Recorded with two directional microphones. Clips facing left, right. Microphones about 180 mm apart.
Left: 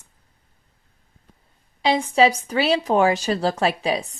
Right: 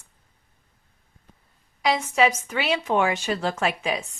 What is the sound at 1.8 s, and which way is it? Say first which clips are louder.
Speech: left 4 dB; 30° left (ahead or behind).